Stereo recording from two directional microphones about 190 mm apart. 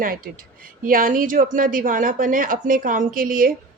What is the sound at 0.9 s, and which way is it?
Speech, 45° right (ahead or behind).